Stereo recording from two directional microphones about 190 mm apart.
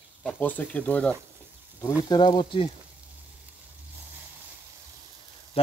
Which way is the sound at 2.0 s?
25° left (ahead or behind).